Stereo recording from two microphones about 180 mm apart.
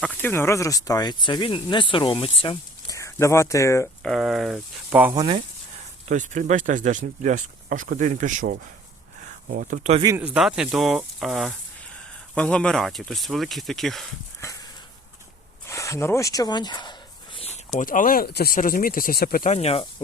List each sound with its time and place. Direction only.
0.0 s speech: 10° left (ahead or behind); by 2.6 s 30° left (ahead or behind)
2.8 s speech: 15° left (ahead or behind)
4.0 s speech: centre (ahead or behind)
4.9 s speech: 10° right (ahead or behind)
6.1 s speech: 40° right (ahead or behind)
9.6 s speech: 50° right (ahead or behind)
10.2 s speech: 5° right (ahead or behind)
14.4 s a sound: 15° left (ahead or behind)
15.6 s speech: 15° left (ahead or behind)
17.3 s a sound: 35° left (ahead or behind)
17.7 s speech: 50° left (ahead or behind)
19.5 s speech: 35° left (ahead or behind)